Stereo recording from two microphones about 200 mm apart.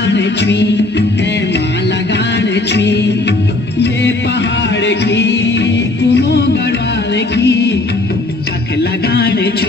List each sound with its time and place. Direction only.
0.0 s music: 60° left (ahead or behind)
2.1 s music: 60° left (ahead or behind)
4.8 s music: 60° left (ahead or behind)
7.3 s music of bollywood: 55° left (ahead or behind)
9.1 s a sound: 55° left (ahead or behind)